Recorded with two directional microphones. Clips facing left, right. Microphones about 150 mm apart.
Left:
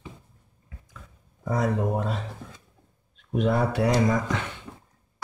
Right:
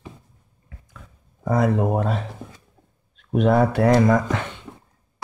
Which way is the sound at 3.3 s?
60° right (ahead or behind).